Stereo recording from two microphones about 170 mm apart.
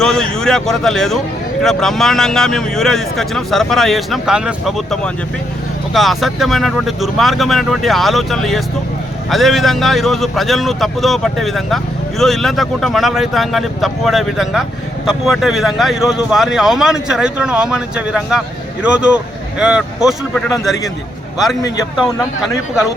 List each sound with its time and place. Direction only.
0.0 s speech: 5° left (ahead or behind)